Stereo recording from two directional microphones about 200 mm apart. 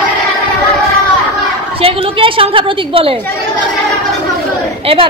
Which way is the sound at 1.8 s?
25° right (ahead or behind).